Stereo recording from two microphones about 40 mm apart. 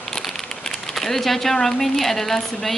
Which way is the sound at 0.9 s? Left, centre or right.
Centre.